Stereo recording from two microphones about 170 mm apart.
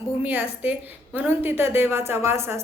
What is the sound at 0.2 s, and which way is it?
A woman's voice, 10° right (ahead or behind).